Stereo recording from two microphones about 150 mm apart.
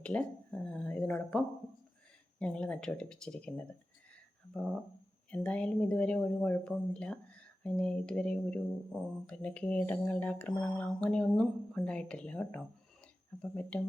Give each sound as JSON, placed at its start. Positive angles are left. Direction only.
{"t": 0.0, "sound": "speech", "side_deg": 10}
{"t": 4.1, "sound": "whispering", "side_deg": 5}
{"t": 5.3, "sound": "speech", "side_deg": 5}